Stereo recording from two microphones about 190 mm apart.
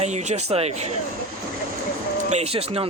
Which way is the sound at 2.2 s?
35° right (ahead or behind).